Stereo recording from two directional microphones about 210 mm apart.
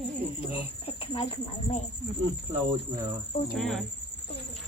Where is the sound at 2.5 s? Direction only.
20° right (ahead or behind).